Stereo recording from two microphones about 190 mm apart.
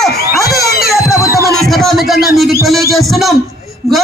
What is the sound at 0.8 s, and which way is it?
Music, centre (ahead or behind).